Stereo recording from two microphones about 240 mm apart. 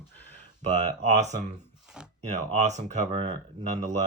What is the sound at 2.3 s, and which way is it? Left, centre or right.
Speech, right.